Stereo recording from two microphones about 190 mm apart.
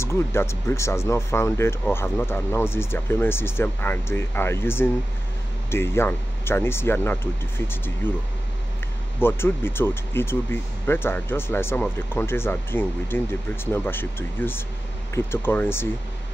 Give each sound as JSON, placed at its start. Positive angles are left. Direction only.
{"t": 0.0, "sound": "speech", "side_deg": 15}
{"t": 9.2, "sound": "speech", "side_deg": 10}